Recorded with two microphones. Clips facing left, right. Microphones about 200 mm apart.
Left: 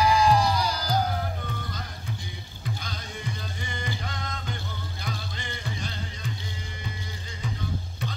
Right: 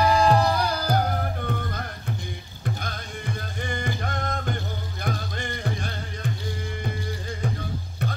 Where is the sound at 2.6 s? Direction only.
55° right (ahead or behind).